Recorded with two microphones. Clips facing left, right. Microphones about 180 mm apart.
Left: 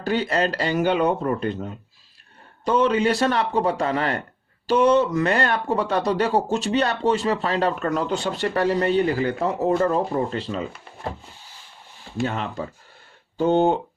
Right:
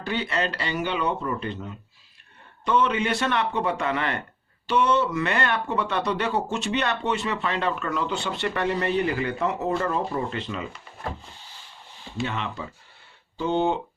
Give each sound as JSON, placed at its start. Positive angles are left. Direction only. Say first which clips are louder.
{"t": 0.0, "sound": "speech", "louder": "left 5 dB", "side_deg": 40}
{"t": 12.1, "sound": "speech", "louder": "left 4 dB", "side_deg": 40}